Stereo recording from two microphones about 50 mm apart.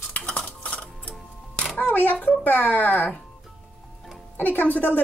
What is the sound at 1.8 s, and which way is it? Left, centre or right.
Camera, left.